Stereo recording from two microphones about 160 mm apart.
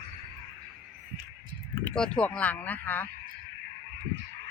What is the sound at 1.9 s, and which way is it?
Speech, 5° left (ahead or behind).